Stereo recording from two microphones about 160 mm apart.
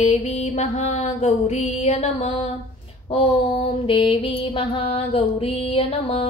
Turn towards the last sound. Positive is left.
turn(degrees=35)  # may be behind; listen again after turning